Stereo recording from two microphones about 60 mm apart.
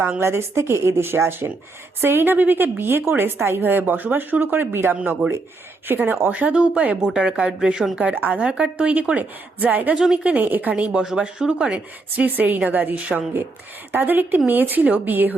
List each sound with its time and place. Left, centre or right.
0.2 s a woman's voice: right; by 7.9 s centre
7.9 s a woman's voice: right
9.9 s speech: centre
10.2 s a woman's voice: right
11.0 s speech: centre
12.1 s a woman's voice: right